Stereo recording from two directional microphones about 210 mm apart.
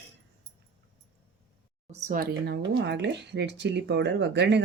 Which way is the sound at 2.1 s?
45° right (ahead or behind).